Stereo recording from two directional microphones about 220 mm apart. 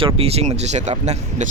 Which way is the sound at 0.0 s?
25° right (ahead or behind).